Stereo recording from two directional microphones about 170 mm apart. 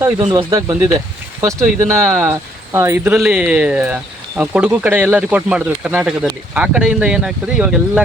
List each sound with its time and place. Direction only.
0.5 s speech: 15° right (ahead or behind)